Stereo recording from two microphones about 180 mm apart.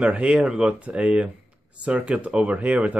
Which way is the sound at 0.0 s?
5° right (ahead or behind).